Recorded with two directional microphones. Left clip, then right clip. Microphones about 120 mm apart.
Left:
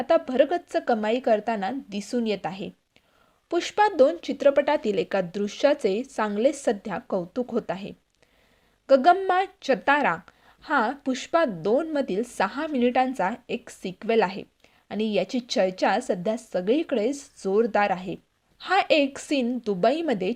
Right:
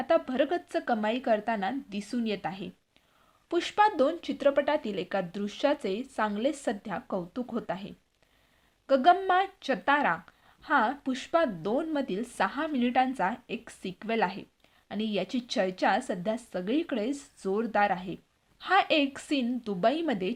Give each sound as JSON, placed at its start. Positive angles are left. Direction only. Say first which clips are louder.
{"t": 0.0, "sound": "a woman's voice", "louder": "left 5 dB", "side_deg": 35}
{"t": 3.5, "sound": "a woman's voice", "louder": "left 3 dB", "side_deg": 30}